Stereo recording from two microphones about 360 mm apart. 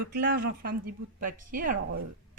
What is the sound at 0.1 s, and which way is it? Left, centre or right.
Speech, right.